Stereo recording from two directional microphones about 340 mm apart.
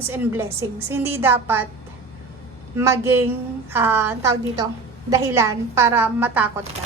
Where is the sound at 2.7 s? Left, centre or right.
Centre.